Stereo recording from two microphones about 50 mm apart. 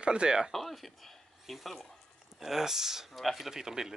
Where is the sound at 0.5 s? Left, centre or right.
Centre.